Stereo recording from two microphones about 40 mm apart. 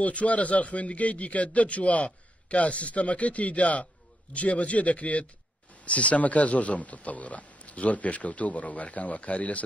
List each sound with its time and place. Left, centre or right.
0.0 s a man's voice: left